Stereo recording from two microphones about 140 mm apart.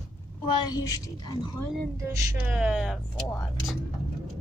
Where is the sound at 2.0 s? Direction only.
15° right (ahead or behind).